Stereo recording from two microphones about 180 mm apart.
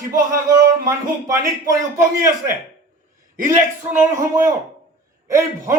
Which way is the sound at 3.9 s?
15° right (ahead or behind).